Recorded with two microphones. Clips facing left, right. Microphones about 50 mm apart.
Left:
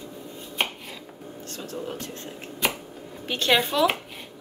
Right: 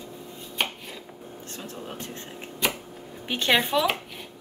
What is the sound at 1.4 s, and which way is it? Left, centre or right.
Music, right.